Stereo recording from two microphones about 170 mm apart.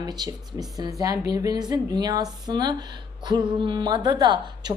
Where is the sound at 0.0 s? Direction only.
25° right (ahead or behind).